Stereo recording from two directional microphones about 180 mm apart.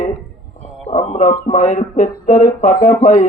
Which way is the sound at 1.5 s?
40° left (ahead or behind).